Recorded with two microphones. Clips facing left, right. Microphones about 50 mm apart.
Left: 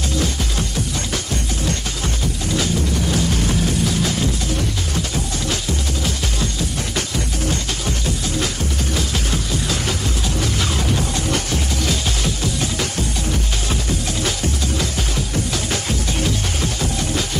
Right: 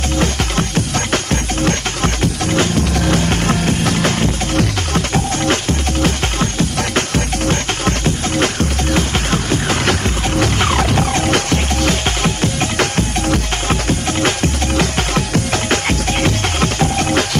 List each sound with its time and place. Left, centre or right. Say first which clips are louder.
0.2 s music: right 6 dB; right